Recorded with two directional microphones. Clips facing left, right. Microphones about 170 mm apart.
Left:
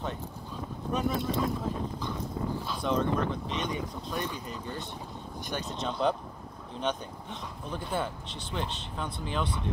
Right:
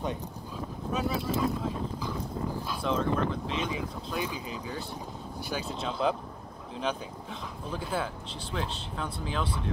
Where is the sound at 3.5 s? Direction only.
5° right (ahead or behind).